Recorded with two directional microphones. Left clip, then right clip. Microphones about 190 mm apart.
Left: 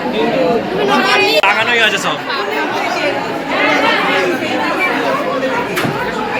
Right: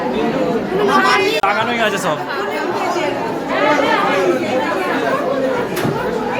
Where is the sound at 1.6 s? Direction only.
55° right (ahead or behind).